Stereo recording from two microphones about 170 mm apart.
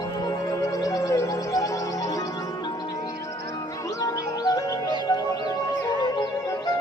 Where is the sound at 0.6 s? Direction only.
20° left (ahead or behind).